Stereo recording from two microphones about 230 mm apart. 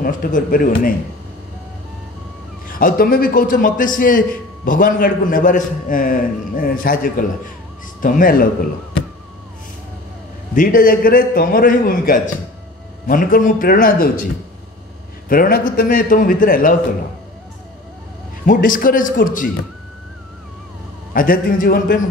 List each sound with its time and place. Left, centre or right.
0.0 s a man's voice: left
2.8 s a man's voice: left
10.5 s a man's voice: left
15.2 s a man's voice: left
18.4 s a man's voice: left
21.1 s a man's voice: left